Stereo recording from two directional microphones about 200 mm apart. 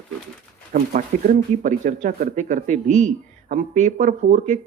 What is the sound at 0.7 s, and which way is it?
Speech, 40° right (ahead or behind).